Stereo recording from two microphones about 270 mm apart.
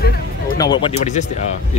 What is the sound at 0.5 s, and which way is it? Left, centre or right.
Speech, centre.